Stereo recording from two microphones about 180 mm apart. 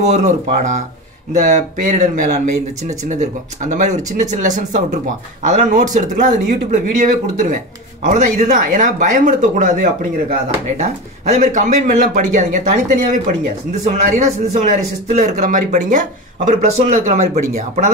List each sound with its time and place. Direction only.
0.0 s speech: 40° right (ahead or behind)